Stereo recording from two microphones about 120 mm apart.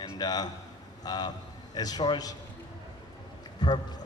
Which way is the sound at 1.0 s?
35° left (ahead or behind).